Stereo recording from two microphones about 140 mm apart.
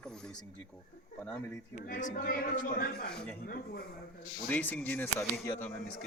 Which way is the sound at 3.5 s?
90° left.